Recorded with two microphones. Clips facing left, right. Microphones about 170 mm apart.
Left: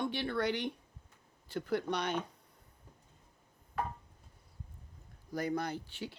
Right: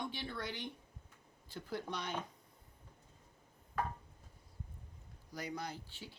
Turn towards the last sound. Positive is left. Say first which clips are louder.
# left 8 dB
turn(degrees=70)  # may be behind; listen again after turning